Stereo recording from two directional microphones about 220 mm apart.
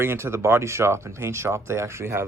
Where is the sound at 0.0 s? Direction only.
10° right (ahead or behind).